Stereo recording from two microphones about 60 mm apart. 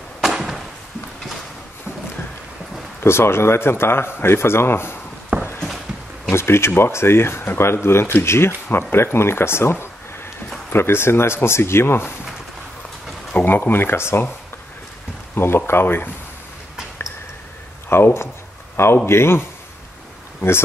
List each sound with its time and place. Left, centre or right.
0.2 s a sound: centre
3.0 s speech: left
5.3 s a sound: right
6.3 s speech: left
13.3 s speech: left
15.3 s speech: left
17.8 s speech: left